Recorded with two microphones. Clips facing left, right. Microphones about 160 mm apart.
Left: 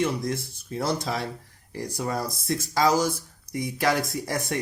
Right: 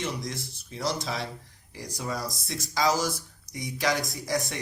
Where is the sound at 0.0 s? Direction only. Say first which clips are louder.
Left 7 dB; 55° left (ahead or behind).